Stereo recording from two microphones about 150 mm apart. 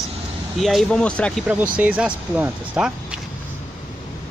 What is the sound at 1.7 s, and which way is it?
Speech, 10° right (ahead or behind).